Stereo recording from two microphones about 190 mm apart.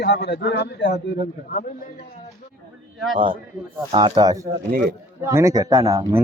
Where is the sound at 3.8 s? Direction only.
20° right (ahead or behind).